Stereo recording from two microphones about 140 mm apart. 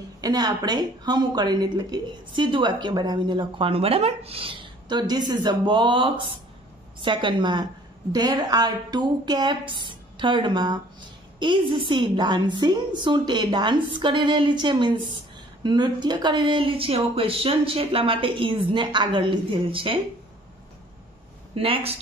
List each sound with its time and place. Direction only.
0.2 s speech: 30° right (ahead or behind)
21.5 s speech: 40° right (ahead or behind)